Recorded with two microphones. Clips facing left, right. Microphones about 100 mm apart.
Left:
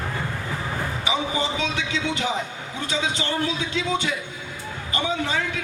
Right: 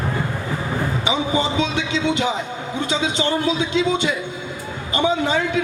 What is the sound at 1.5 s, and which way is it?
A man's voice, 25° right (ahead or behind).